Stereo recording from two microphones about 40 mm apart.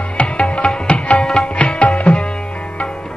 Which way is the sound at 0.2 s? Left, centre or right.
Left.